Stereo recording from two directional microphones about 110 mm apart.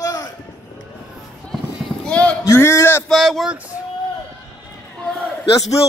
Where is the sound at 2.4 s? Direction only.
25° left (ahead or behind).